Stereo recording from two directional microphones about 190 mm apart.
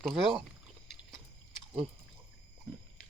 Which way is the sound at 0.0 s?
Centre (ahead or behind).